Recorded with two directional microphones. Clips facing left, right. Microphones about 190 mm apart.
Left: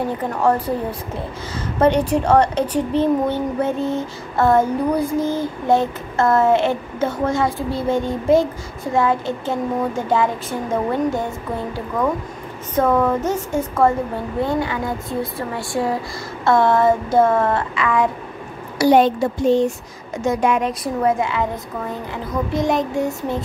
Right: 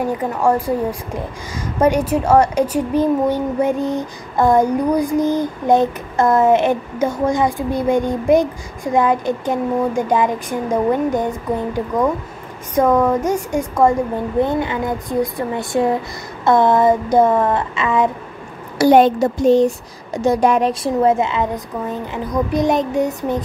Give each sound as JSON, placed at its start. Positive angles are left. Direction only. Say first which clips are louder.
{"t": 0.0, "sound": "speech", "louder": "right 2 dB", "side_deg": -10}
{"t": 12.7, "sound": "speech", "louder": "right 3 dB", "side_deg": -15}
{"t": 18.8, "sound": "a woman's voice", "louder": "right 3 dB", "side_deg": -50}